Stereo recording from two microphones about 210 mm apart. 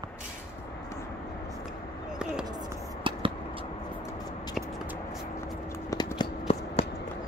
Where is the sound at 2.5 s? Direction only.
20° right (ahead or behind).